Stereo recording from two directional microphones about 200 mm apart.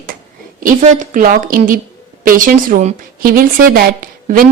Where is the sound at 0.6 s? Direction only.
40° right (ahead or behind).